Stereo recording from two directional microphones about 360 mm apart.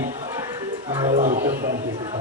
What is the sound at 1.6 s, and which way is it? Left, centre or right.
Speech, right.